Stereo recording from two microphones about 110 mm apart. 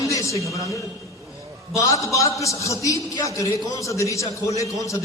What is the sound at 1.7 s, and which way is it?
A man's voice, 30° left (ahead or behind).